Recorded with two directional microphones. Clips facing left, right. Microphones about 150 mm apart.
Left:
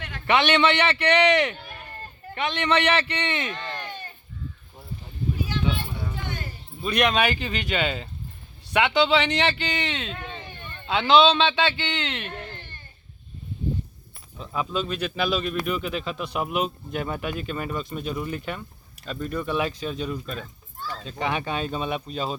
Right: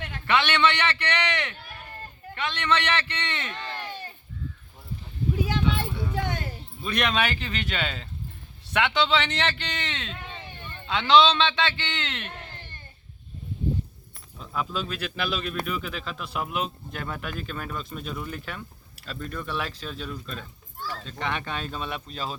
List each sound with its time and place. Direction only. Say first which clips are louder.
0.3 s a man's voice: left 3 dB; 15° left (ahead or behind)
6.8 s a man's voice: left 4 dB; 5° left (ahead or behind)
14.3 s speech: left 3 dB; centre (ahead or behind)